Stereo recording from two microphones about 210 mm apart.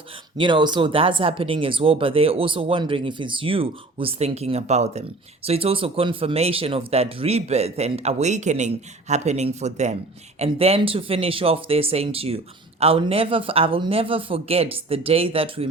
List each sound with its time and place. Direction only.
0.3 s speech: 20° right (ahead or behind)